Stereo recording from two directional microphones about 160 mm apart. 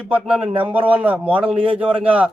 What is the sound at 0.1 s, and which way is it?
A man's voice, 5° right (ahead or behind).